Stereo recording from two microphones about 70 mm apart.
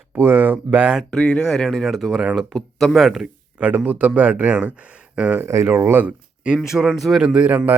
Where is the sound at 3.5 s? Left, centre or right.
Right.